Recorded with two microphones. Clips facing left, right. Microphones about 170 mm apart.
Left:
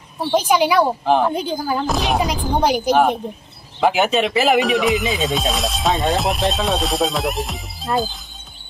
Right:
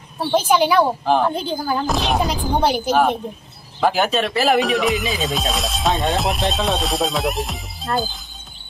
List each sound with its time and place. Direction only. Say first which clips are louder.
0.3 s speech: even; 10° left (ahead or behind)
2.6 s speech: left 2 dB; 15° left (ahead or behind)
4.6 s speech: left 2 dB; centre (ahead or behind)